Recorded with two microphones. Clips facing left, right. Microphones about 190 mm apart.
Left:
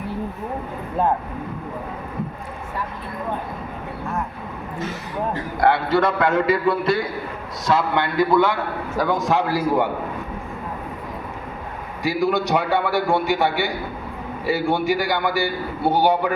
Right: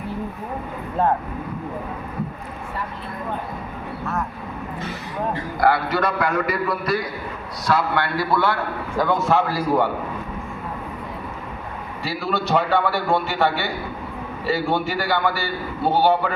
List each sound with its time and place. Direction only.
5.5 s a man's voice: 25° left (ahead or behind)
12.0 s a man's voice: 15° left (ahead or behind)